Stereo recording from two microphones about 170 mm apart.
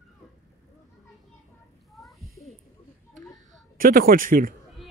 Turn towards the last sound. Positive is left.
turn(degrees=-55)  # may be behind; listen again after turning